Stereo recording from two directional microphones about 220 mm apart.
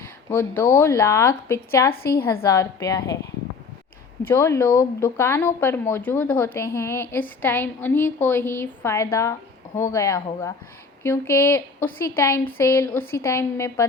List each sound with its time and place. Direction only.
0.3 s a woman's voice: 10° left (ahead or behind)
4.3 s a woman's voice: 10° left (ahead or behind)